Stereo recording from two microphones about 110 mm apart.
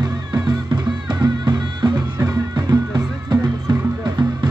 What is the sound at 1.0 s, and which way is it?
Music, 40° right (ahead or behind).